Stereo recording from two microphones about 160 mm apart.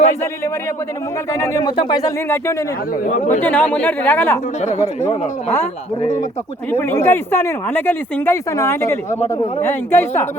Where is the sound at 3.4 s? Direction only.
10° left (ahead or behind).